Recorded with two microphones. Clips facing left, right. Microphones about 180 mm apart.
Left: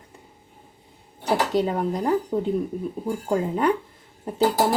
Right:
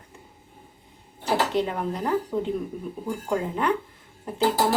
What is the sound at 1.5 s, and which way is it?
Speech, 40° left (ahead or behind).